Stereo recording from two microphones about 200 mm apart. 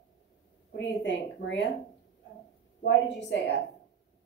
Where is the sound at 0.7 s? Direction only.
65° left (ahead or behind).